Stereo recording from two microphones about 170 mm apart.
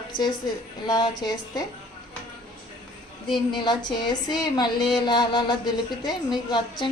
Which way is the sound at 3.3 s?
25° left (ahead or behind).